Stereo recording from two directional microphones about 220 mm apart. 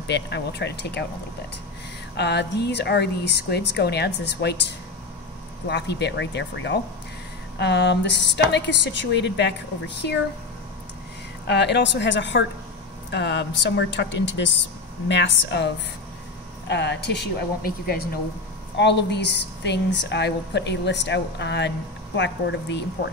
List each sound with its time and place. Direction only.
0.0 s a woman's voice: 50° left (ahead or behind)
2.1 s a woman's voice: 50° left (ahead or behind)
11.4 s a woman's voice: 50° left (ahead or behind)